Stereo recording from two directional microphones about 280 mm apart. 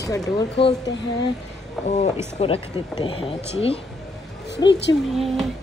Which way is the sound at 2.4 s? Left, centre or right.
Centre.